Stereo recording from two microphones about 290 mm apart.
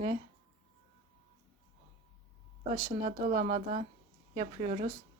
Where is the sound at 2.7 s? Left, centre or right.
Right.